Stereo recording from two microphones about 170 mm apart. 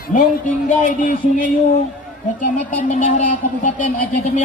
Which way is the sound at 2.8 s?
45° left (ahead or behind).